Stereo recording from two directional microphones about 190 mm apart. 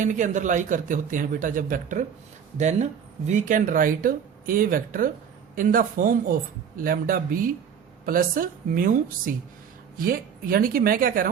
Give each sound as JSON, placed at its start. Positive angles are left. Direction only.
{"t": 0.0, "sound": "speech", "side_deg": -40}